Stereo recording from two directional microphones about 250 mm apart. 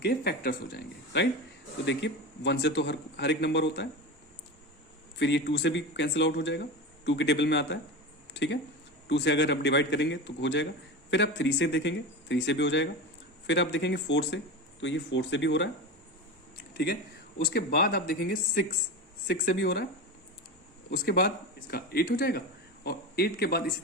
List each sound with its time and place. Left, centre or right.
0.0 s speech: left
5.2 s speech: left
8.3 s a sound: left
9.0 s speech: left
16.7 s speech: left
20.9 s speech: left